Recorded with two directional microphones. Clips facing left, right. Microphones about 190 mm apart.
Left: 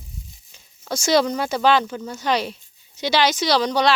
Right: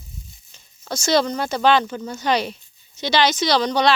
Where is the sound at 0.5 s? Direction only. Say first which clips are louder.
Left 1 dB; 10° left (ahead or behind).